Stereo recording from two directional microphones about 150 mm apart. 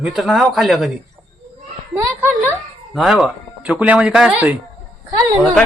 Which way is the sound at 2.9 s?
Centre (ahead or behind).